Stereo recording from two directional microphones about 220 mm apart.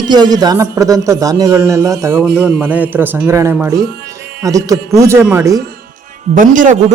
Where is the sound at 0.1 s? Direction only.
20° right (ahead or behind).